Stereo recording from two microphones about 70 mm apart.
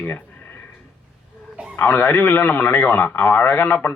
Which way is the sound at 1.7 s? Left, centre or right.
Left.